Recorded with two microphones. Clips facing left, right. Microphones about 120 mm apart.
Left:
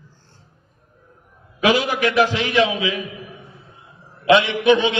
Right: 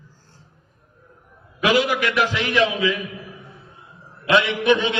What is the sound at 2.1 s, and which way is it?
Speech, 30° left (ahead or behind).